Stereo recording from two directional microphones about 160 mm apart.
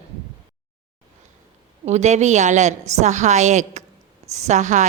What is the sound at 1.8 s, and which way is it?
A woman's voice, 45° right (ahead or behind).